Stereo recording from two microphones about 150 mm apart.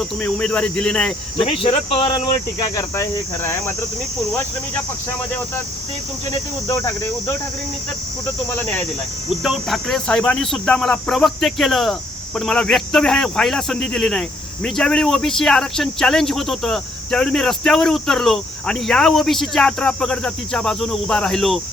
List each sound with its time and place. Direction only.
0.2 s speech: 5° left (ahead or behind)
1.4 s speech: 35° left (ahead or behind); by 3.6 s 20° left (ahead or behind)
6.7 s speech: 20° left (ahead or behind)
9.4 s speech: centre (ahead or behind)